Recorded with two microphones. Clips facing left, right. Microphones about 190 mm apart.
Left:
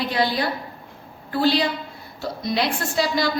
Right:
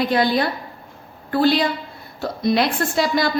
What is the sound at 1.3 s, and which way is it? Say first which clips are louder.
A woman's voice: right 3 dB; 55° right (ahead or behind).